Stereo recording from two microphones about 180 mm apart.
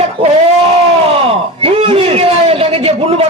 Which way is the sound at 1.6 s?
30° right (ahead or behind).